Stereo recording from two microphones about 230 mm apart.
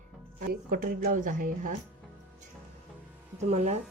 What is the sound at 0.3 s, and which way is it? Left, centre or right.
A woman's voice, right.